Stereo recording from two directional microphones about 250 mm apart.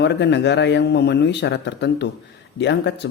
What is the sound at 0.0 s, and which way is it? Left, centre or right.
Speech, left.